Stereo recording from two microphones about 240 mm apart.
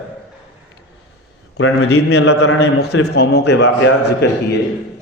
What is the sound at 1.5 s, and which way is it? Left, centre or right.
Speech, left.